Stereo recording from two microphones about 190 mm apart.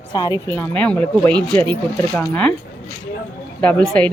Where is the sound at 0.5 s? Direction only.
10° left (ahead or behind).